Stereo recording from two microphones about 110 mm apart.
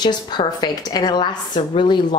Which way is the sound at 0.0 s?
40° left (ahead or behind).